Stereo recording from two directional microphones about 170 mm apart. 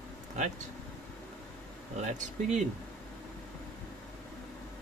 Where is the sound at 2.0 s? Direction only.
45° right (ahead or behind).